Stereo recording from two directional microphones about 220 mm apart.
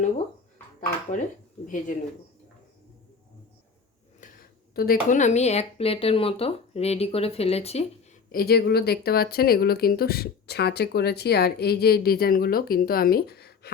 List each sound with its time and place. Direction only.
0.8 s speech: 35° left (ahead or behind)
4.2 s a sound: 35° left (ahead or behind)
4.7 s speech: 40° left (ahead or behind)
8.3 s speech: 45° left (ahead or behind)